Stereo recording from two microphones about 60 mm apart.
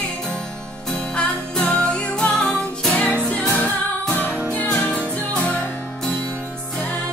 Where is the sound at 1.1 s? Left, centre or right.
Centre.